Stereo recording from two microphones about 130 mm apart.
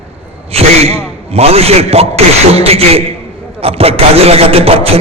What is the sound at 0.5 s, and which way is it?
A man's voice, 50° right (ahead or behind).